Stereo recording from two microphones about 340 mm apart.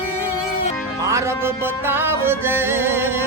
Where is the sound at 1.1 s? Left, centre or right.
Centre.